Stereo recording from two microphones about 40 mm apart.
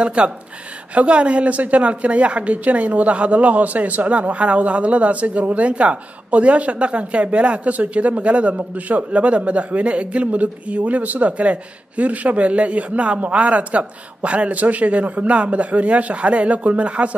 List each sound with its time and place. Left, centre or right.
0.0 s a woman's voice: right